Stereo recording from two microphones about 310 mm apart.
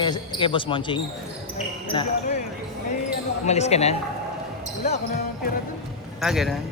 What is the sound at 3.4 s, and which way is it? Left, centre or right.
Speech, left.